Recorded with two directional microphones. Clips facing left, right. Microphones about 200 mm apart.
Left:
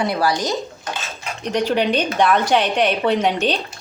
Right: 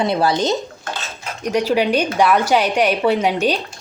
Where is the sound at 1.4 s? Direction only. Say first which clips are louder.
Right 2 dB; 10° right (ahead or behind).